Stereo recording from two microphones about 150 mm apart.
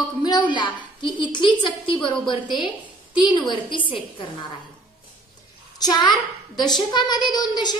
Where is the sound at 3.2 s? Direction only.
30° left (ahead or behind).